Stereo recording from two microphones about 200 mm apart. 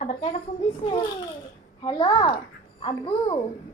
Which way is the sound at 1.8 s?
20° left (ahead or behind).